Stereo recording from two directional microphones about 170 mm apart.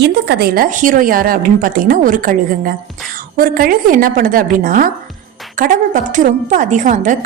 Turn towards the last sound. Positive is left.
turn(degrees=-50)  # may be behind; listen again after turning